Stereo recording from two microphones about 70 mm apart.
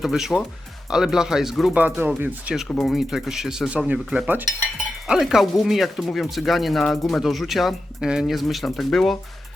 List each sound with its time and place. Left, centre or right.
0.0 s speech: centre
1.7 s speech: right
2.7 s speech: centre
3.7 s speech: centre